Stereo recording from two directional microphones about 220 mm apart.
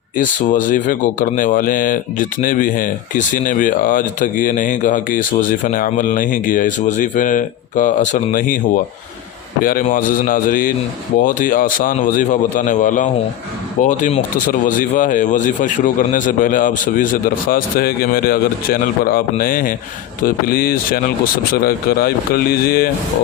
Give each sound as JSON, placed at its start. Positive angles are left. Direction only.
{"t": 0.2, "sound": "speech", "side_deg": 35}